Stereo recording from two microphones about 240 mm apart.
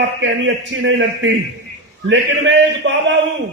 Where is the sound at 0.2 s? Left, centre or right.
Right.